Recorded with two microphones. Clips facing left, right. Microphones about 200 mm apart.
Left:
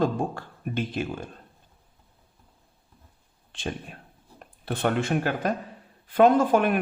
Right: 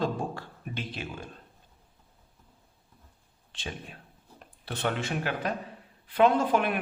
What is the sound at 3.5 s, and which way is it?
Speech, 50° left (ahead or behind).